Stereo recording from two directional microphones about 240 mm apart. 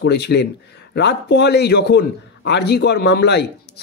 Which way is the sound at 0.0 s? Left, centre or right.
Left.